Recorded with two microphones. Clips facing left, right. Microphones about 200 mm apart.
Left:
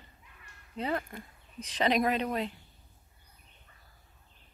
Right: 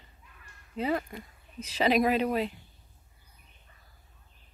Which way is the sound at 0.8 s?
5° right (ahead or behind).